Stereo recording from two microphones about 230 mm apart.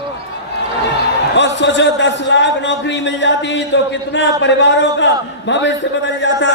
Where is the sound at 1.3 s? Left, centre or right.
Left.